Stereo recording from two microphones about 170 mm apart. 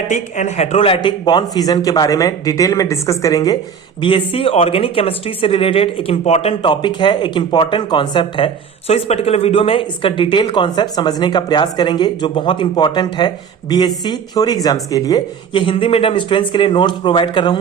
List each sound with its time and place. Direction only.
0.1 s speech: 45° left (ahead or behind); by 3.6 s 20° left (ahead or behind)
4.0 s speech: 30° left (ahead or behind)